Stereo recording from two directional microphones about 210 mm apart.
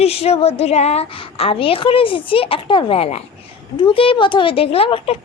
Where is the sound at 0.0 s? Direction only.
30° left (ahead or behind).